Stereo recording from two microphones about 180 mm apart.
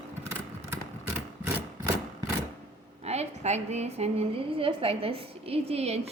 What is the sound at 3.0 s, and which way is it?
A woman's voice, 35° right (ahead or behind).